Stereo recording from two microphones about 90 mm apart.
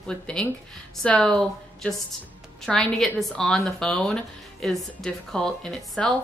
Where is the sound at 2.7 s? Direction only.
5° left (ahead or behind).